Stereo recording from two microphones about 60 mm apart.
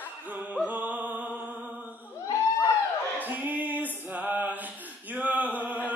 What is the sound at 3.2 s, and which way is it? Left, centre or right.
Music, right.